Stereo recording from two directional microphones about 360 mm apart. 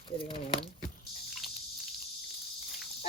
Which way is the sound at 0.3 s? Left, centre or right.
Centre.